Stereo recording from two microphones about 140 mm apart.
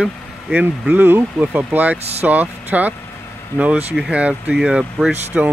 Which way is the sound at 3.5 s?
10° left (ahead or behind).